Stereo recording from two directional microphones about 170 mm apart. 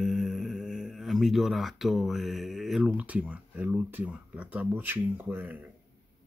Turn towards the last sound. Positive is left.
turn(degrees=-10)  # may be behind; listen again after turning